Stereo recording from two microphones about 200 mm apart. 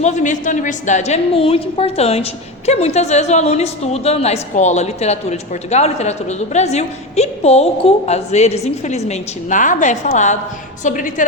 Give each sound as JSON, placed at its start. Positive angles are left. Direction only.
{"t": 0.0, "sound": "a woman's voice", "side_deg": 35}